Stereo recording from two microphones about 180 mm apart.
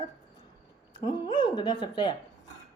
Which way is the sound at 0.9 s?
25° left (ahead or behind).